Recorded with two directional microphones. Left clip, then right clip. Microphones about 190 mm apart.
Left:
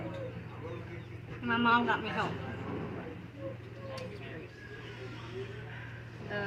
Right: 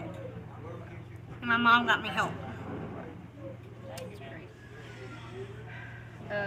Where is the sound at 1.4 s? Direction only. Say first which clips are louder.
Right 4 dB; centre (ahead or behind).